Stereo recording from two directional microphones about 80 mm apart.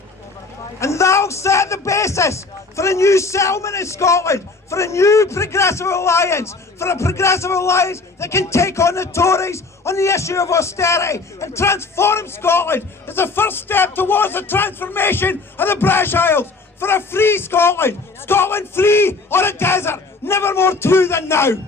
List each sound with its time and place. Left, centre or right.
0.8 s speech: left